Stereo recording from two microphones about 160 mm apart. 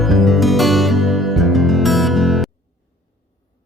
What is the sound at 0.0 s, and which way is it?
Music, centre (ahead or behind).